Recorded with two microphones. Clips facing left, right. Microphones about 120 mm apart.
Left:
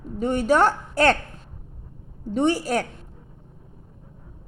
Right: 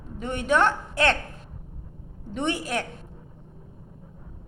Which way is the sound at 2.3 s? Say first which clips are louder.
Left 6 dB; 35° left (ahead or behind).